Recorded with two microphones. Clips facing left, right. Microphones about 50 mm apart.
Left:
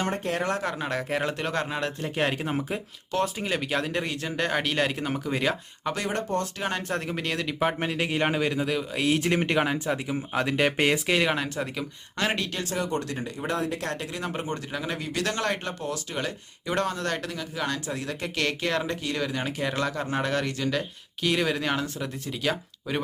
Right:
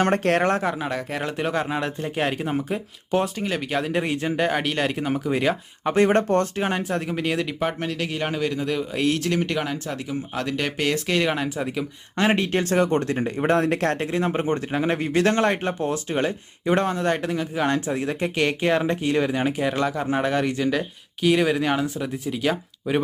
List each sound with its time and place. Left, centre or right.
0.0 s speech: right
0.6 s speech: centre
4.0 s speech: centre
4.4 s speech: centre
6.0 s speech: right
6.6 s speech: centre
6.8 s speech: centre
7.6 s speech: centre
8.7 s speech: centre
9.1 s speech: centre
11.0 s speech: centre
12.1 s speech: right
12.6 s speech: right; by 23.0 s centre